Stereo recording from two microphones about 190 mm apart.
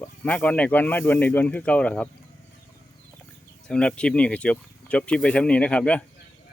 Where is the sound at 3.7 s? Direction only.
5° left (ahead or behind).